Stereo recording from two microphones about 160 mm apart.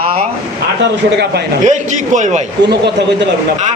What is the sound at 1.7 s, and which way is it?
Speech, 50° right (ahead or behind).